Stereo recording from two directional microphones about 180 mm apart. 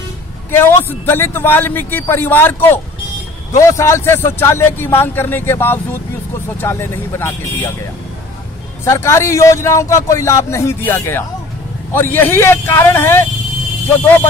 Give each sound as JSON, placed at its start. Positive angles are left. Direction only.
{"t": 0.5, "sound": "a man's voice", "side_deg": 10}
{"t": 8.8, "sound": "a man's voice", "side_deg": 15}